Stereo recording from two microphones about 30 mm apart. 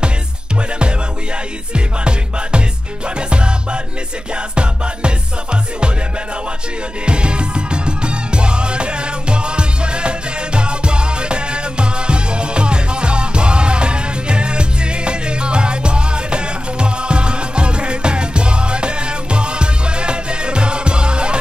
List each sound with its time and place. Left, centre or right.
1.7 s music: right
7.1 s music: right